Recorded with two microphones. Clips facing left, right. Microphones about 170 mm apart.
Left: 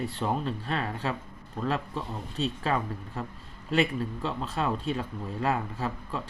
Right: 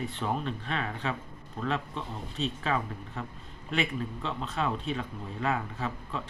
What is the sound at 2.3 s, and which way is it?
Speech, 40° left (ahead or behind).